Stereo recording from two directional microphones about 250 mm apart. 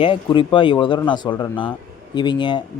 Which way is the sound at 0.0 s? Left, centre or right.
Centre.